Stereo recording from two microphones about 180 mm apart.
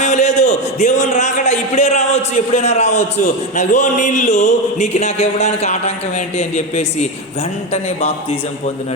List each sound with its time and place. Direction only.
0.0 s a man's voice: 40° left (ahead or behind)